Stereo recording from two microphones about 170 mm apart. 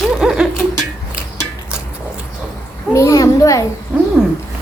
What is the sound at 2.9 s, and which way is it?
Speech, 20° left (ahead or behind).